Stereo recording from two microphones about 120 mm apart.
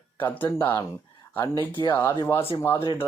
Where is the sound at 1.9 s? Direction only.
20° left (ahead or behind).